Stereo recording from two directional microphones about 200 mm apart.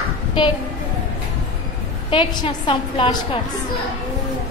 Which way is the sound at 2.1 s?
25° left (ahead or behind).